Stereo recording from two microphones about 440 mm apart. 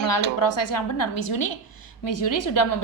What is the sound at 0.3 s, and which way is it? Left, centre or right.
A woman's voice, left.